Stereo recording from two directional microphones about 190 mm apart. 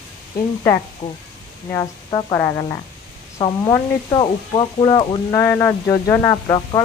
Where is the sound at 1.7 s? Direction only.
20° left (ahead or behind).